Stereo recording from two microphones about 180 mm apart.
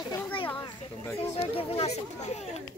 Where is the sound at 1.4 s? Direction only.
35° left (ahead or behind).